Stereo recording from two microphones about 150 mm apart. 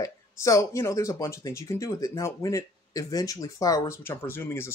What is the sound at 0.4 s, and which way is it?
A man's voice, 20° left (ahead or behind).